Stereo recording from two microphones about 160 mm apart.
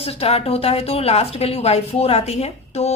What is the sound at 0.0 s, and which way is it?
A woman's voice, 40° left (ahead or behind).